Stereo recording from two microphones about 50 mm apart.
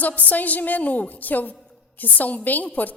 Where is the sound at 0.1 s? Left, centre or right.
Left.